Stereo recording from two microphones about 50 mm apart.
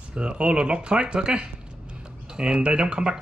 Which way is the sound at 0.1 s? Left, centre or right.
Right.